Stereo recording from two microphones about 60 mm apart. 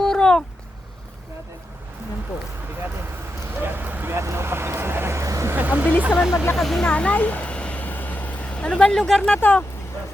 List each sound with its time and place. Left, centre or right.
0.0 s a sound: centre
3.4 s vehicle: right
4.1 s vehicle: right
5.2 s vehicle: right
5.5 s vehicle: right
6.1 s speech: centre
6.8 s vehicle: left
9.2 s speech: left